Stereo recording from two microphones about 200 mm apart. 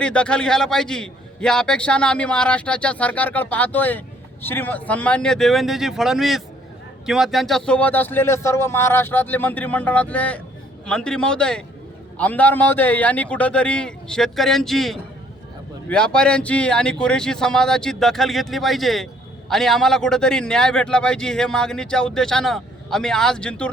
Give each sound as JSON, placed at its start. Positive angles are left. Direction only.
{"t": 0.0, "sound": "a man's voice", "side_deg": 5}